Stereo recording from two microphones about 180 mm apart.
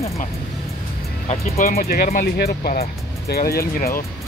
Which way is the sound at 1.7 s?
55° left (ahead or behind).